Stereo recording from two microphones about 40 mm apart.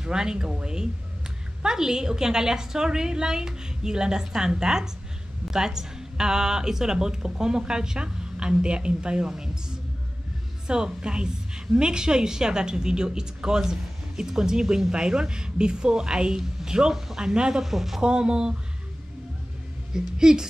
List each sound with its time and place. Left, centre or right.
0.0 s speech: centre
9.3 s a sound: centre
10.7 s a woman's voice: right; by 18.0 s centre
18.0 s a woman's voice: right
19.9 s speech: centre